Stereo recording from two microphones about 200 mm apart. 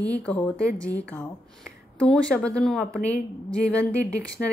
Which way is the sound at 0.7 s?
15° right (ahead or behind).